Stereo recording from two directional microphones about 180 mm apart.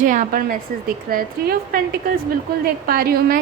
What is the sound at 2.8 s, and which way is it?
Speech, 55° right (ahead or behind).